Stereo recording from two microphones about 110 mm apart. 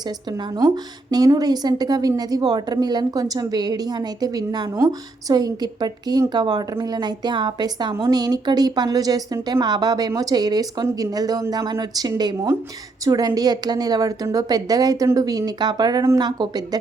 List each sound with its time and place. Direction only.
0.0 s a woman's voice: 40° right (ahead or behind)
4.7 s speech: 25° right (ahead or behind)
5.3 s a woman's voice: 40° right (ahead or behind)